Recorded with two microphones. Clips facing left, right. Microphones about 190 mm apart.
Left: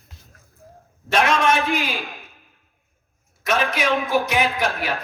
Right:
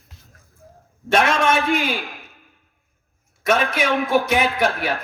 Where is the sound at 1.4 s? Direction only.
Centre (ahead or behind).